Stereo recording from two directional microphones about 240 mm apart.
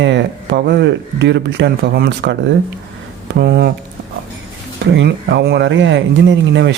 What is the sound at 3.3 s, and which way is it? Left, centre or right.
Speech, right.